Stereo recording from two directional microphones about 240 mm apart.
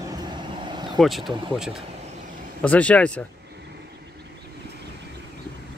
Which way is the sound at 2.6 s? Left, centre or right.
Centre.